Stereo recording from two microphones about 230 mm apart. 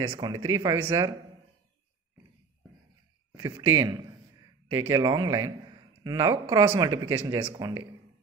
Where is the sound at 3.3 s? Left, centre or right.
Centre.